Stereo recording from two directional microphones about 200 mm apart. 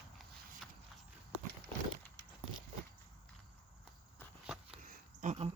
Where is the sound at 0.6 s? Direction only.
Centre (ahead or behind).